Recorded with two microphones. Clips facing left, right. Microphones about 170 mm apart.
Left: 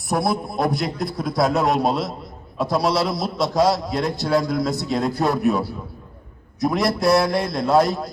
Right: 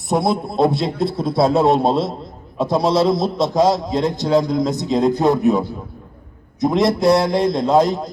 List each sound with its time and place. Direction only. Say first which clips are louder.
0.1 s a man's voice: right 3 dB; 25° right (ahead or behind)